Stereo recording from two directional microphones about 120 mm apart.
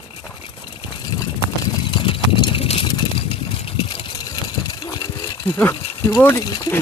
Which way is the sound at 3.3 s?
55° left (ahead or behind).